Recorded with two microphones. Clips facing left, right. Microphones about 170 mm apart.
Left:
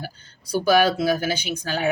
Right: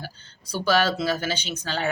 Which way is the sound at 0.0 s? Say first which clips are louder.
Left 3 dB; 10° left (ahead or behind).